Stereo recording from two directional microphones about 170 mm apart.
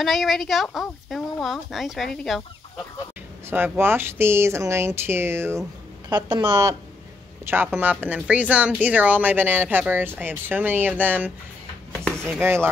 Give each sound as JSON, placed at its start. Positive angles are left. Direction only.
{"t": 0.0, "sound": "speech", "side_deg": 0}
{"t": 3.4, "sound": "speech", "side_deg": -10}
{"t": 6.0, "sound": "speech", "side_deg": -25}
{"t": 7.4, "sound": "speech", "side_deg": -10}